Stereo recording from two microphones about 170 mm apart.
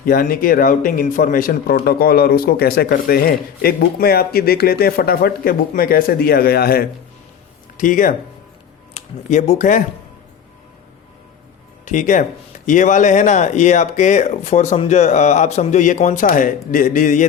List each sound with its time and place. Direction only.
0.0 s speech: 55° left (ahead or behind)
7.8 s speech: 50° left (ahead or behind)
11.9 s speech: 50° left (ahead or behind)